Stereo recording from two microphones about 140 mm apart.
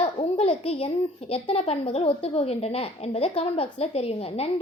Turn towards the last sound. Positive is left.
turn(degrees=45)  # may be behind; listen again after turning